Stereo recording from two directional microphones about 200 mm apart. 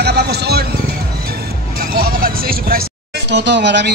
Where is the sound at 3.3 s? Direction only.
60° right (ahead or behind).